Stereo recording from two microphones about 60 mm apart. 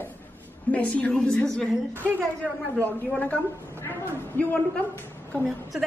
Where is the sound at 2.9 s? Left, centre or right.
Left.